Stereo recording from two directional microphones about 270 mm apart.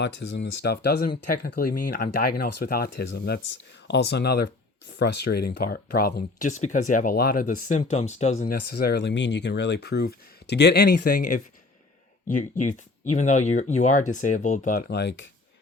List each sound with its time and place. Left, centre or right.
0.2 s speech: left
12.4 s speech: left